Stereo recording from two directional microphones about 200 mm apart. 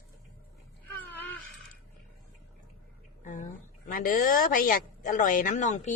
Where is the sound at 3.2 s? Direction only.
40° left (ahead or behind).